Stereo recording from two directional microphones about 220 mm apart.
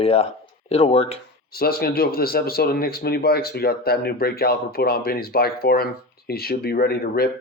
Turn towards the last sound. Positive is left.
turn(degrees=45)  # may be behind; listen again after turning